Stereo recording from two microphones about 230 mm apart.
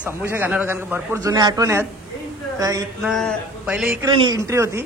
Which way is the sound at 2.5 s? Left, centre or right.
Centre.